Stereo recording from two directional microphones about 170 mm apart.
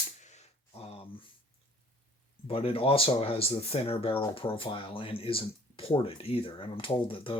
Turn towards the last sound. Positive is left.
turn(degrees=30)  # may be behind; listen again after turning